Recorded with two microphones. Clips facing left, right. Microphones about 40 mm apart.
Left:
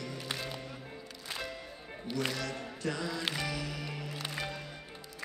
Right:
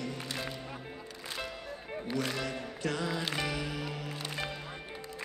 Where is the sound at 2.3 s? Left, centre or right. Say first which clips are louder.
Right 2 dB; right.